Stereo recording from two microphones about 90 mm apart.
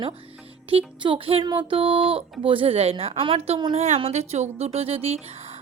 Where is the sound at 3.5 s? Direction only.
65° right (ahead or behind).